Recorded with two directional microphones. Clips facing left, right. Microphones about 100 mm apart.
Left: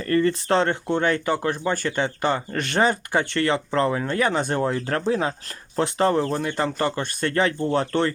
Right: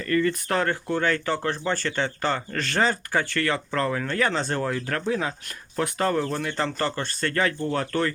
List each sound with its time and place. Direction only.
0.0 s speech: 35° left (ahead or behind)
6.5 s speech: 15° left (ahead or behind)